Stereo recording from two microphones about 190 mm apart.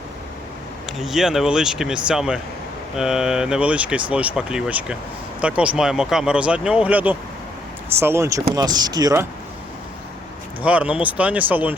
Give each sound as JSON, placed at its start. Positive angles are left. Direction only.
{"t": 0.9, "sound": "speech", "side_deg": 0}
{"t": 10.6, "sound": "speech", "side_deg": -5}